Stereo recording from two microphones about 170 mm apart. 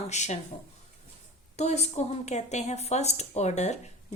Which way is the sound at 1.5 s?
40° left (ahead or behind).